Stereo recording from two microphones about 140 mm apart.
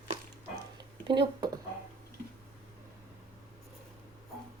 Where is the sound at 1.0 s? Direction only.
30° right (ahead or behind).